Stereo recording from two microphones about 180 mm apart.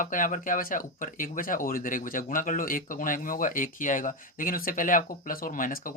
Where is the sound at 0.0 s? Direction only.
50° left (ahead or behind).